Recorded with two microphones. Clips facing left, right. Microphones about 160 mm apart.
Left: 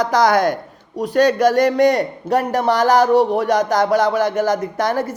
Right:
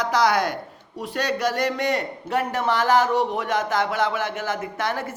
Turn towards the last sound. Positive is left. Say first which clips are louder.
# left 7 dB
turn(degrees=40)  # may be behind; listen again after turning